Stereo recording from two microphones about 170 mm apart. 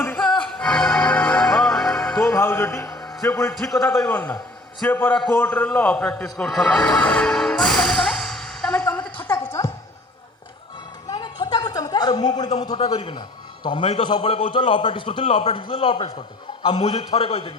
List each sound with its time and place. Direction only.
0.2 s music: 5° left (ahead or behind)
2.1 s music: 15° left (ahead or behind)
3.2 s a man's voice: 20° left (ahead or behind)
3.5 s a man's voice: centre (ahead or behind)
3.8 s a man's voice: 20° left (ahead or behind)
9.2 s a sound: 15° left (ahead or behind)
11.1 s a sound: 25° left (ahead or behind)
12.4 s a man's voice: 25° left (ahead or behind)